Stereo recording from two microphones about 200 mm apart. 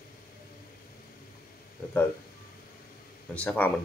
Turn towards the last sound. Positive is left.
turn(degrees=5)  # may be behind; listen again after turning